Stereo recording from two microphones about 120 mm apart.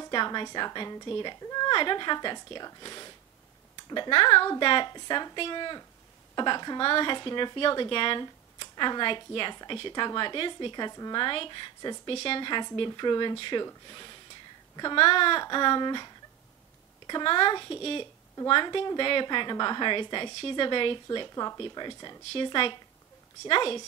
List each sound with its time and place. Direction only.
0.1 s a woman's voice: 40° left (ahead or behind)
12.1 s a woman's voice: 50° left (ahead or behind)